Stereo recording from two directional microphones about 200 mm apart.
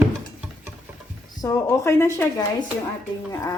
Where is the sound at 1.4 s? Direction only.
15° left (ahead or behind).